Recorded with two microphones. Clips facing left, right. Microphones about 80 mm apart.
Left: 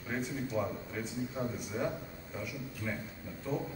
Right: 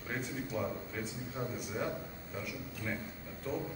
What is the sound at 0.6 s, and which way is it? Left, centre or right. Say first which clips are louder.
A man's voice: left 2 dB; centre.